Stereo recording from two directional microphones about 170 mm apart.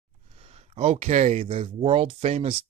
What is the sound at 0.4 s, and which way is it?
Speech, 35° right (ahead or behind).